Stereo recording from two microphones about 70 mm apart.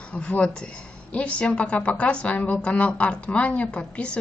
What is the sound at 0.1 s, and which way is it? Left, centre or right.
A woman's voice, centre.